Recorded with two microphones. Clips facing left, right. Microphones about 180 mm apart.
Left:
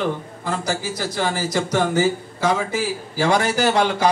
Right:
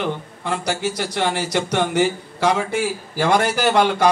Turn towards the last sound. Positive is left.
turn(degrees=-60)  # may be behind; listen again after turning